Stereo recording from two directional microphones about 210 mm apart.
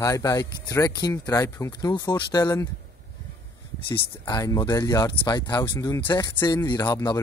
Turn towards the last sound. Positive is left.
turn(degrees=15)  # may be behind; listen again after turning